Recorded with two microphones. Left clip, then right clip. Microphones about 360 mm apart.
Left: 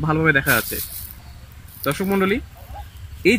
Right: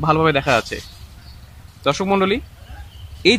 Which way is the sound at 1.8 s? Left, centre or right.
Centre.